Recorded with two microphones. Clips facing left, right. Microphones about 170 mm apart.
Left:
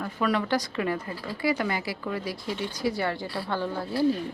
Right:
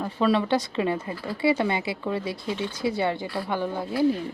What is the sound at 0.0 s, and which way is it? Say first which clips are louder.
Speech: right 4 dB; 25° right (ahead or behind).